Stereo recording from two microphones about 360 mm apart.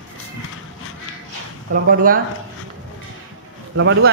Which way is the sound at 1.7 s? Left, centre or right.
Right.